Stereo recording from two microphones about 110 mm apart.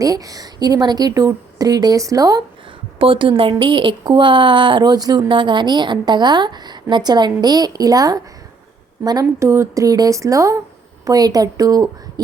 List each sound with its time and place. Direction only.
0.0 s speech: 35° right (ahead or behind)
3.0 s a woman's voice: 50° right (ahead or behind); by 8.2 s 35° right (ahead or behind)
9.4 s a woman's voice: 25° right (ahead or behind)